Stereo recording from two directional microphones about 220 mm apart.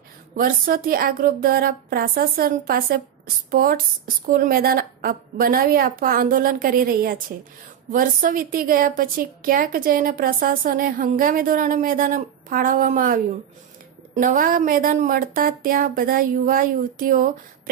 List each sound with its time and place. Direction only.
0.4 s a woman's voice: 40° right (ahead or behind)